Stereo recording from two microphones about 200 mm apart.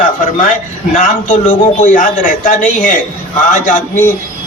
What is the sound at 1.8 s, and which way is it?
A man's voice, 40° left (ahead or behind).